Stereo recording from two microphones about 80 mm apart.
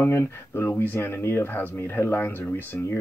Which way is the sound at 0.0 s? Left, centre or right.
Left.